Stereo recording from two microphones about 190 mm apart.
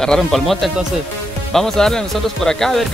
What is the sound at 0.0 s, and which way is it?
Speech, centre (ahead or behind).